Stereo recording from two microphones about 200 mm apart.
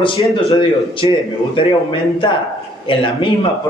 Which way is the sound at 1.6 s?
25° left (ahead or behind).